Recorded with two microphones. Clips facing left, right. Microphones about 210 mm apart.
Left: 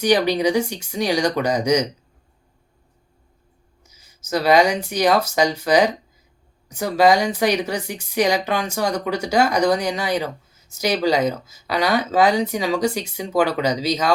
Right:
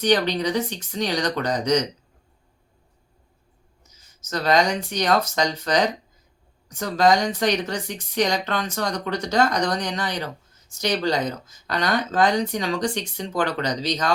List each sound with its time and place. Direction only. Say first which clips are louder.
0.0 s speech: left 3 dB; 10° left (ahead or behind)
3.8 s speech: left 7 dB; 10° left (ahead or behind)